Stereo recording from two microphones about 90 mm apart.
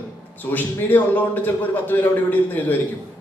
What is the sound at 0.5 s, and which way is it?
A man's voice, 20° left (ahead or behind).